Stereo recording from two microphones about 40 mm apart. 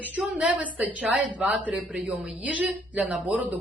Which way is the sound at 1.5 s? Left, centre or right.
Right.